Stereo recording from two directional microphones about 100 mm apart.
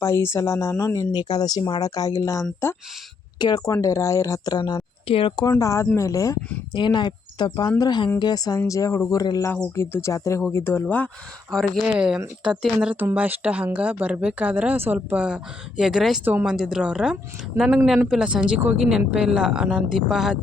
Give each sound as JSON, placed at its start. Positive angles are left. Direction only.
{"t": 0.0, "sound": "speech", "side_deg": 30}
{"t": 1.1, "sound": "speech", "side_deg": 45}
{"t": 3.3, "sound": "speech", "side_deg": 45}
{"t": 3.8, "sound": "speech", "side_deg": 35}
{"t": 5.0, "sound": "speech", "side_deg": 65}
{"t": 5.4, "sound": "speech", "side_deg": 35}
{"t": 6.7, "sound": "speech", "side_deg": 50}
{"t": 9.7, "sound": "speech", "side_deg": 25}
{"t": 11.5, "sound": "speech", "side_deg": 5}
{"t": 11.9, "sound": "a woman's voice", "side_deg": -10}
{"t": 13.0, "sound": "a woman's voice", "side_deg": -20}
{"t": 16.2, "sound": "a woman's voice", "side_deg": -15}